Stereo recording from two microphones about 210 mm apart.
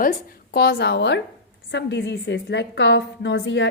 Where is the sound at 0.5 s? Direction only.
50° left (ahead or behind).